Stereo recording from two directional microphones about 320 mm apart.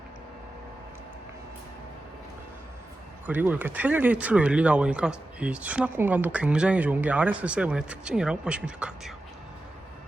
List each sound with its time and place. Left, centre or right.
3.2 s speech: centre